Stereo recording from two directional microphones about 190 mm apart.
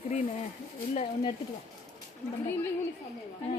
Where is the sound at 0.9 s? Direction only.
25° left (ahead or behind).